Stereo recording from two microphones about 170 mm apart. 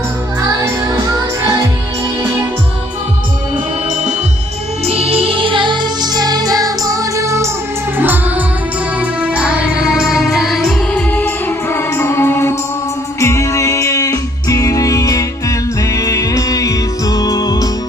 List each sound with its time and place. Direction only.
0.4 s music: 20° right (ahead or behind)
4.9 s music: 35° right (ahead or behind); by 17.7 s 25° left (ahead or behind)